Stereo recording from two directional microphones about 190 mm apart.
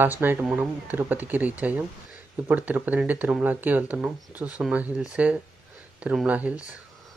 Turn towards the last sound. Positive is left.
turn(degrees=-5)  # may be behind; listen again after turning